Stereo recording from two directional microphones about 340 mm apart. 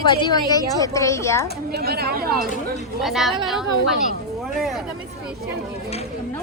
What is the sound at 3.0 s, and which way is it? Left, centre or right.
A woman's voice, centre.